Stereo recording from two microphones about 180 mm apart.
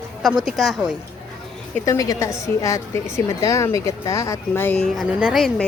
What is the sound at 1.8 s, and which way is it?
A woman's voice, 20° left (ahead or behind).